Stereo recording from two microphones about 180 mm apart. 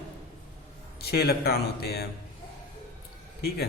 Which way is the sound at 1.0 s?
60° left (ahead or behind).